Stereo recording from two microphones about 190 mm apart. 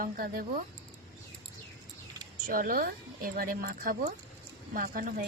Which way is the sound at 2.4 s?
45° right (ahead or behind).